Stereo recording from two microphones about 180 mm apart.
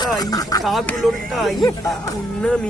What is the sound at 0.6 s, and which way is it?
Speech, centre (ahead or behind).